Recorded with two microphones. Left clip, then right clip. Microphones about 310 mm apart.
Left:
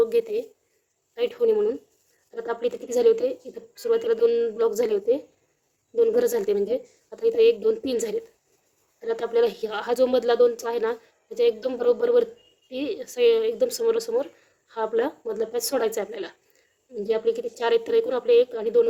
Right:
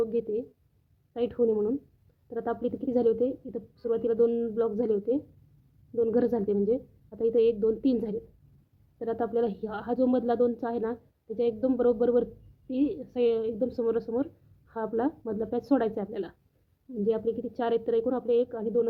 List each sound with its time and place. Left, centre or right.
0.0 s a woman's voice: left